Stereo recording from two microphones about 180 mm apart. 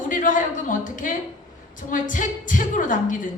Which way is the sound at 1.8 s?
45° left (ahead or behind).